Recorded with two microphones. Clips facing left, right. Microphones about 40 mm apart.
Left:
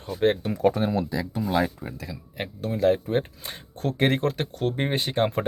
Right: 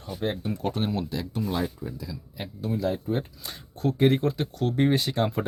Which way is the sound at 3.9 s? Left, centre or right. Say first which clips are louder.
Right 1 dB; left.